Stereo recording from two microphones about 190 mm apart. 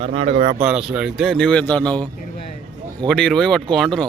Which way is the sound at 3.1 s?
5° left (ahead or behind).